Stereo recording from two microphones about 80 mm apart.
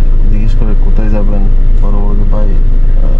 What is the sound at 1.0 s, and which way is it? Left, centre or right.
Speech, right.